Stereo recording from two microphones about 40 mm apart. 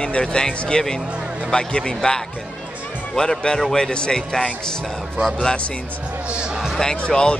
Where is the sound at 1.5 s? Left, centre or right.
Left.